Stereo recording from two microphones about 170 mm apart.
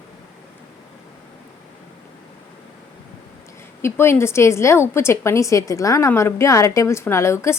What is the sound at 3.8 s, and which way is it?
A woman's voice, 15° left (ahead or behind).